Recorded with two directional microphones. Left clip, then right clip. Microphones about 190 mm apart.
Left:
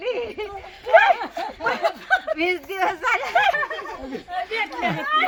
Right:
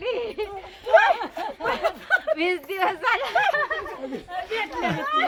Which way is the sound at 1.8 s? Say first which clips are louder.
Even; 10° right (ahead or behind).